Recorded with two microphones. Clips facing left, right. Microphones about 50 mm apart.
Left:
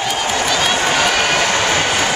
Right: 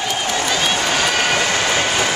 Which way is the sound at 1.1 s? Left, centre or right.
Centre.